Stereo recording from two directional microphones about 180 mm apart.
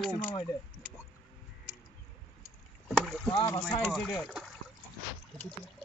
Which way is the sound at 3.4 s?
25° left (ahead or behind).